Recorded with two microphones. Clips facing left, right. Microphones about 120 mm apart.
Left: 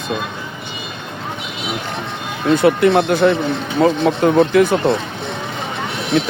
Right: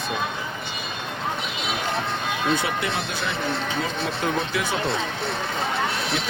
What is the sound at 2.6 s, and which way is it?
Speech, 60° left (ahead or behind).